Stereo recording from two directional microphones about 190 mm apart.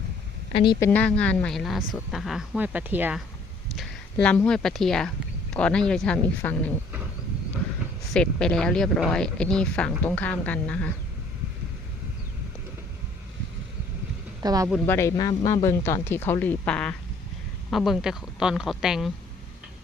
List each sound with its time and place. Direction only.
0.5 s a woman's voice: 25° left (ahead or behind)
0.9 s speech: 10° left (ahead or behind); by 3.2 s 5° right (ahead or behind)
3.8 s speech: 5° left (ahead or behind)
8.1 s speech: 5° left (ahead or behind)
14.4 s speech: 20° right (ahead or behind)
14.8 s speech: 15° left (ahead or behind); by 19.1 s centre (ahead or behind)